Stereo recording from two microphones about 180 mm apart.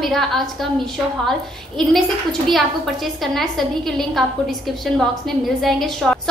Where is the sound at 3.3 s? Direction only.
Centre (ahead or behind).